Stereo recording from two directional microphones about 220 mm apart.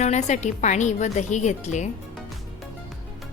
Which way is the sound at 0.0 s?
30° left (ahead or behind).